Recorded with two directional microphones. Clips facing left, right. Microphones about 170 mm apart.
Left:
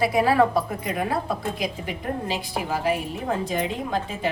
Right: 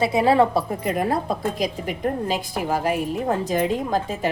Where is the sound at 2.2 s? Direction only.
45° right (ahead or behind).